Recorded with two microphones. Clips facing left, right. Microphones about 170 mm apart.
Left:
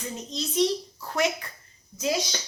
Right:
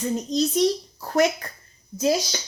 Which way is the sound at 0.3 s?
40° right (ahead or behind).